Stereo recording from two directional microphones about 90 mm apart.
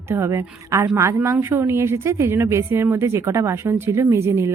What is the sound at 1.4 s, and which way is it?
A woman's voice, 25° right (ahead or behind).